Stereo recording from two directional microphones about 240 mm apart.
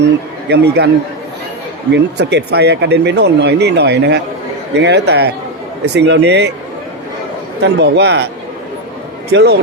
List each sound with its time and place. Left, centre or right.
0.0 s a man's voice: right
1.9 s speech: right
7.6 s speech: right
9.3 s speech: right